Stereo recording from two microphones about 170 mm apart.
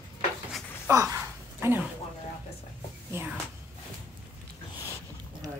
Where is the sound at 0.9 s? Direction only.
15° right (ahead or behind).